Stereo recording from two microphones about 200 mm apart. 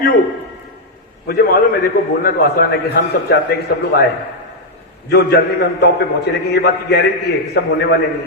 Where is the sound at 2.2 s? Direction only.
50° left (ahead or behind).